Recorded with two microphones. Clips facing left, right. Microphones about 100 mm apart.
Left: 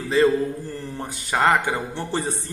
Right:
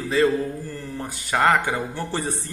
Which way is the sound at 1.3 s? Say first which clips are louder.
Even; 25° left (ahead or behind).